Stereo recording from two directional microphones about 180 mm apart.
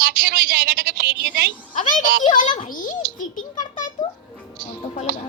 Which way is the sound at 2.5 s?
50° left (ahead or behind).